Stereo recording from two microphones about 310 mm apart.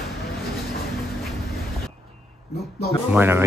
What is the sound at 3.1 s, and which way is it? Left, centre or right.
Speech, centre.